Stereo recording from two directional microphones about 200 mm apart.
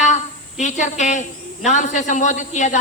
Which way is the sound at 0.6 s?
35° left (ahead or behind).